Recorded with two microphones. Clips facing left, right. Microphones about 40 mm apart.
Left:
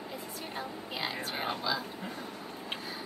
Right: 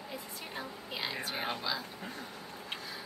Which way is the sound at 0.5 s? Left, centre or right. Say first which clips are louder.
Left 2 dB; centre.